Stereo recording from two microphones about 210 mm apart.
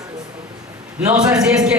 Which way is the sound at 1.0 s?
10° right (ahead or behind).